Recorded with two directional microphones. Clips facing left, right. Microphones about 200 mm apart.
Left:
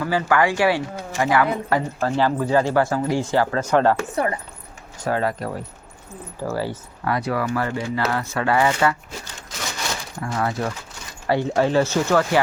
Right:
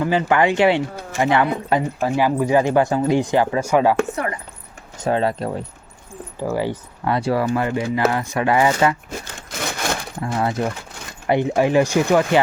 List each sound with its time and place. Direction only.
0.0 s speech: 20° right (ahead or behind)
1.7 s speech: 15° right (ahead or behind)
5.0 s speech: 25° right (ahead or behind)
9.2 s a sound: 55° right (ahead or behind)
10.2 s speech: 25° right (ahead or behind)